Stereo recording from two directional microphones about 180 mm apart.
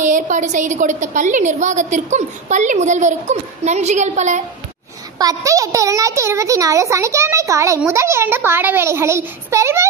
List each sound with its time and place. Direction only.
0.0 s a woman's voice: 45° right (ahead or behind)
5.2 s a child's voice: 20° right (ahead or behind)